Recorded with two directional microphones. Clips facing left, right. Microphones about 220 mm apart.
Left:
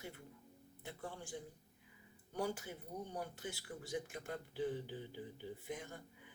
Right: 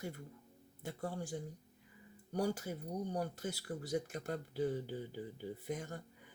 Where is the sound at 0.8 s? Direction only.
40° right (ahead or behind).